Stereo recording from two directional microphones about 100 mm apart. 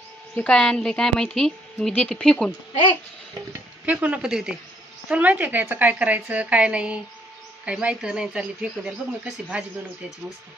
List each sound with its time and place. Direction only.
0.4 s a woman's voice: 10° left (ahead or behind)
3.8 s speech: 15° right (ahead or behind)